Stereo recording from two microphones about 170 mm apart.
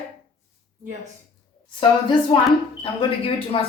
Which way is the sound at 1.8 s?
30° left (ahead or behind).